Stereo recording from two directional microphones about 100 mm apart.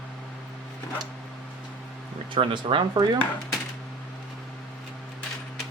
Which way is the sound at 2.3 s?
60° right (ahead or behind).